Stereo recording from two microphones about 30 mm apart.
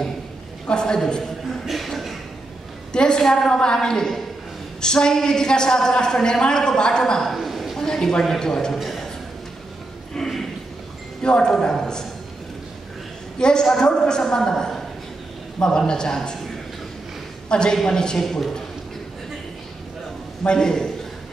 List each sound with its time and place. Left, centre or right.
0.7 s a woman's voice: left
1.7 s a sound: centre
2.9 s a woman's voice: left
7.3 s a sound: centre
7.7 s a woman's voice: centre
10.1 s speech: centre
11.2 s a woman's voice: left
13.4 s a woman's voice: left
15.9 s a woman's voice: left
17.5 s a woman's voice: left
20.4 s a woman's voice: left